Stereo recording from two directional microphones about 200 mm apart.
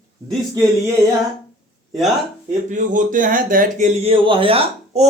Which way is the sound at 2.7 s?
40° right (ahead or behind).